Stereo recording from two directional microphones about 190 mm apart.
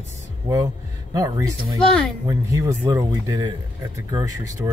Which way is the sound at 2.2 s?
15° right (ahead or behind).